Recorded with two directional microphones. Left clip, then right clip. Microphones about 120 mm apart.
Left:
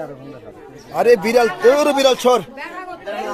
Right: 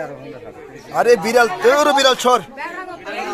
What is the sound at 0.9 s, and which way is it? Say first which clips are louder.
A man's voice: even; 35° left (ahead or behind).